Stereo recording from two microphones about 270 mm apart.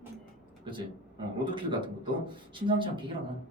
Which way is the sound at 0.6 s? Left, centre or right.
Centre.